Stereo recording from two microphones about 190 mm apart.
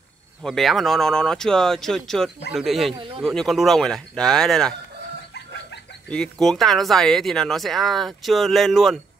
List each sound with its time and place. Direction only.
0.4 s speech: centre (ahead or behind)
2.9 s speech: 25° right (ahead or behind)
3.2 s speech: centre (ahead or behind)
6.0 s speech: 5° left (ahead or behind)